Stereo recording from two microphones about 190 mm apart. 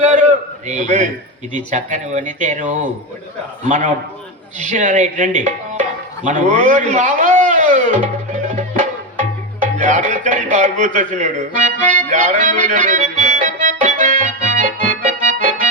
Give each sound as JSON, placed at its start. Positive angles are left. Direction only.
{"t": 0.0, "sound": "a sound", "side_deg": -40}
{"t": 0.7, "sound": "speech", "side_deg": -40}
{"t": 8.5, "sound": "music", "side_deg": -40}
{"t": 12.1, "sound": "accordion", "side_deg": -40}